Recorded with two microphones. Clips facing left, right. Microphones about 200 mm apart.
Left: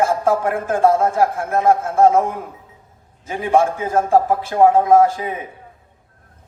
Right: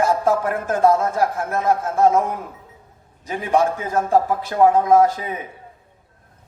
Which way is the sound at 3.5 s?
45° left (ahead or behind).